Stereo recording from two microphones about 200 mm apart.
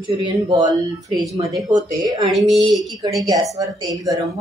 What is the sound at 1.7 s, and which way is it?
Speech, 20° right (ahead or behind).